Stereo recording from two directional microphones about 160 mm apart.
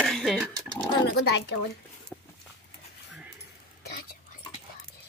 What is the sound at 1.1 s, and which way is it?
Speech, 90° left.